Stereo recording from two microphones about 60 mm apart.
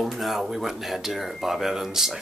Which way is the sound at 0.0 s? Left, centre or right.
Centre.